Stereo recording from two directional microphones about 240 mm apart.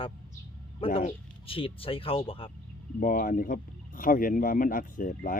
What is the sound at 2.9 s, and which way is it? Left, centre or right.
Speech, left.